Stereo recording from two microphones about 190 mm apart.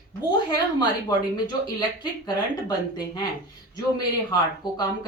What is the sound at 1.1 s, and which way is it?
Speech, 20° left (ahead or behind).